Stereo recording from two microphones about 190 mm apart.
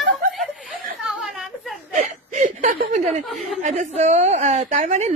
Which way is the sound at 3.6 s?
40° right (ahead or behind).